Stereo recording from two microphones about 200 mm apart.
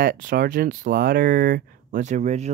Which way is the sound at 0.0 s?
45° right (ahead or behind).